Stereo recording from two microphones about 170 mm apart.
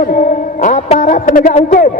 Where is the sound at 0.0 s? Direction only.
55° left (ahead or behind).